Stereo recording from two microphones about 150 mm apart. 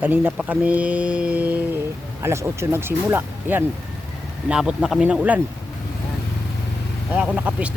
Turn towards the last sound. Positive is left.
turn(degrees=-10)  # may be behind; listen again after turning